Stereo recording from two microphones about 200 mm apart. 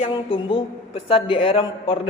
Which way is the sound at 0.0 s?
25° left (ahead or behind).